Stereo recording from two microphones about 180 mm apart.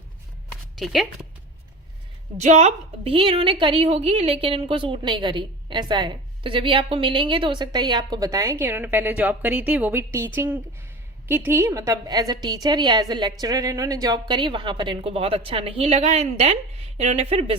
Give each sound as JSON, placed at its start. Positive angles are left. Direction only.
{"t": 0.8, "sound": "speech", "side_deg": 0}
{"t": 2.4, "sound": "a woman's voice", "side_deg": -40}